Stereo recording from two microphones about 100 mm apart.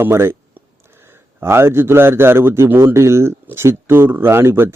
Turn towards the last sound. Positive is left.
turn(degrees=-25)  # may be behind; listen again after turning